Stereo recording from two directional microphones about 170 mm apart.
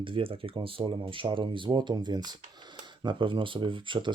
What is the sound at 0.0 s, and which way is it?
Speech, 30° right (ahead or behind).